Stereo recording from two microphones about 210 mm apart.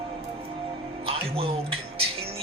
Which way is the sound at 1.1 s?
25° right (ahead or behind).